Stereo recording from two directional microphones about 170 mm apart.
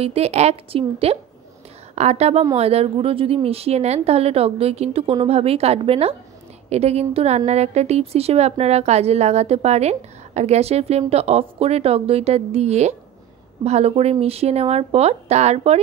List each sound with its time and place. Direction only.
0.0 s a woman's voice: 35° right (ahead or behind)